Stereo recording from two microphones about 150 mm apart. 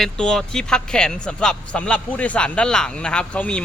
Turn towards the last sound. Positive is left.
turn(degrees=5)  # may be behind; listen again after turning